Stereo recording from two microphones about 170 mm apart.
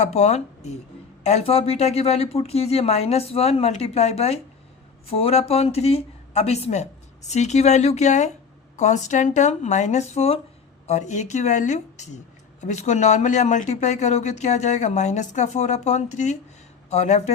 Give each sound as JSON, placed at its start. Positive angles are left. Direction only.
{"t": 0.0, "sound": "speech", "side_deg": 40}